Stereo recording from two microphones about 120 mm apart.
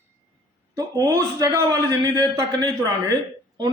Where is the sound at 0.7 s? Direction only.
30° right (ahead or behind).